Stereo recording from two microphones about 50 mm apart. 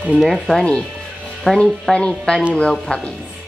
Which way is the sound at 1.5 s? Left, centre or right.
Left.